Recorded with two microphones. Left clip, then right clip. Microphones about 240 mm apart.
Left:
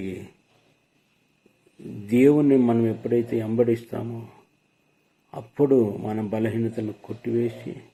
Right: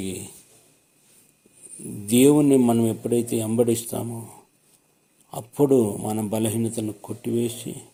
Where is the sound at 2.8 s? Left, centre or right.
Right.